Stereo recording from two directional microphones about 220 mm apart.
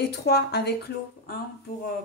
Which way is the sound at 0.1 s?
45° left (ahead or behind).